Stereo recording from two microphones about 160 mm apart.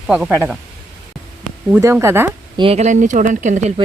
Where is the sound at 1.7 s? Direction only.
15° right (ahead or behind).